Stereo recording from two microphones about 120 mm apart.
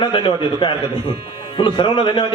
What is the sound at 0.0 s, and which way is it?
A man's voice, 45° left (ahead or behind).